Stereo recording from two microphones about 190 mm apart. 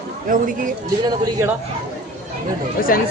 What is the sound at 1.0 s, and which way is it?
Speech, 20° right (ahead or behind).